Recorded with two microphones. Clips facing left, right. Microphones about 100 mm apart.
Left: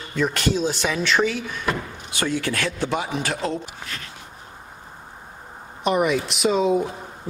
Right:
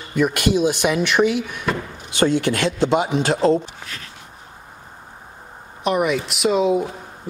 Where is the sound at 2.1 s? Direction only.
30° right (ahead or behind).